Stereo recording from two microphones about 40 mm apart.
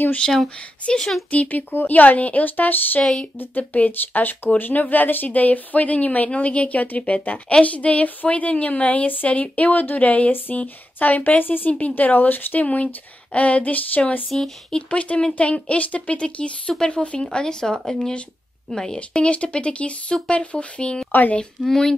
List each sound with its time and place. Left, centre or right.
0.2 s a woman's voice: centre
1.3 s speech: left
1.7 s speech: left
3.0 s a woman's voice: centre
3.3 s speech: left
12.6 s speech: left
14.3 s speech: centre
14.8 s speech: left
17.2 s a woman's voice: left
19.2 s speech: left
21.6 s a woman's voice: centre